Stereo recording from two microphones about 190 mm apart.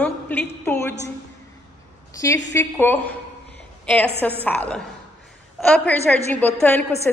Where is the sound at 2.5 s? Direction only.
10° left (ahead or behind).